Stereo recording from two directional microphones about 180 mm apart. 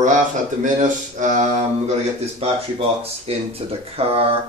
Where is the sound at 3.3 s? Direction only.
35° right (ahead or behind).